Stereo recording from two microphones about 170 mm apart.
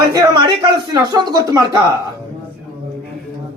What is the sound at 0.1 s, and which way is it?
Speech, 25° right (ahead or behind).